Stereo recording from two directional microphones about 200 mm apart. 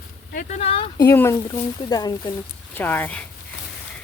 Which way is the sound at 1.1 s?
15° left (ahead or behind).